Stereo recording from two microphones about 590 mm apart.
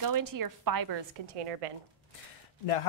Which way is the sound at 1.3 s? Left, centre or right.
Right.